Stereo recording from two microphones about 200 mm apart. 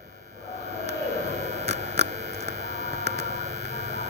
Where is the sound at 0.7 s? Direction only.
35° right (ahead or behind).